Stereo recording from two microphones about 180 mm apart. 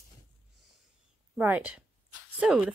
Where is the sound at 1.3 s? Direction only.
10° right (ahead or behind).